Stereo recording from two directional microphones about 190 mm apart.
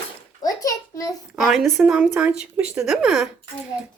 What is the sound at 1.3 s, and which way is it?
Speech, centre (ahead or behind).